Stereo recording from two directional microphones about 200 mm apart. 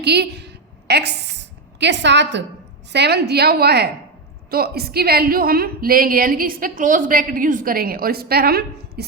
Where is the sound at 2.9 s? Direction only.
55° right (ahead or behind).